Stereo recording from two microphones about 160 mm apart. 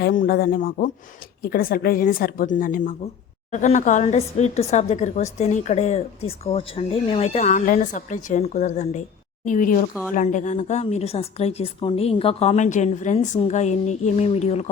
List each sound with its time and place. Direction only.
0.0 s a woman's voice: 65° left (ahead or behind); by 14.7 s 40° left (ahead or behind)